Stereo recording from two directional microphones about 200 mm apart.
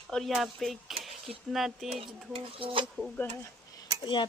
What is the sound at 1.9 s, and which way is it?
Speech, 25° right (ahead or behind).